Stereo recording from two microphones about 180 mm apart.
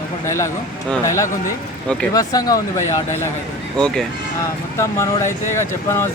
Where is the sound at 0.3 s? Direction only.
15° left (ahead or behind).